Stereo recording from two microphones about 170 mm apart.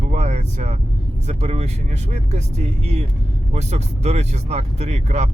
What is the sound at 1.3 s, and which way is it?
Speech, 40° right (ahead or behind).